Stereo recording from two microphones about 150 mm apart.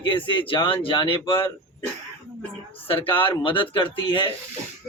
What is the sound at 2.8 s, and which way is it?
A man's voice, 40° left (ahead or behind).